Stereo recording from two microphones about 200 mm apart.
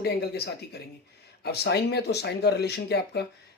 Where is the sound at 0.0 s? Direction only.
55° left (ahead or behind).